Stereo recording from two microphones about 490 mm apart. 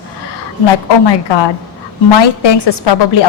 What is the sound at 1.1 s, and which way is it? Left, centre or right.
A woman's voice, left.